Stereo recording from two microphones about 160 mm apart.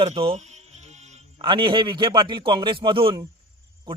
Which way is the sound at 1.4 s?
30° right (ahead or behind).